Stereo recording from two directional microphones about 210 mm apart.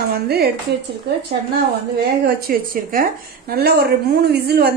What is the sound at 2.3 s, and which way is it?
Speech, 45° right (ahead or behind).